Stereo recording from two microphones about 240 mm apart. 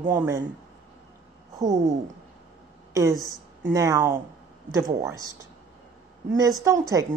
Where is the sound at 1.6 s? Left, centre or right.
Centre.